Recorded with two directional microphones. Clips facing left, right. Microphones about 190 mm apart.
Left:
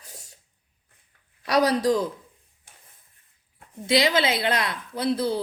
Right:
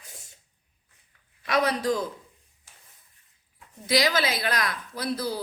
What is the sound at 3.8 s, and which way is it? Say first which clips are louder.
A woman's voice: left 3 dB; 25° left (ahead or behind).